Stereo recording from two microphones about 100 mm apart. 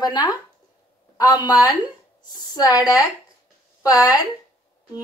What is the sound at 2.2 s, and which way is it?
Speech, 45° left (ahead or behind).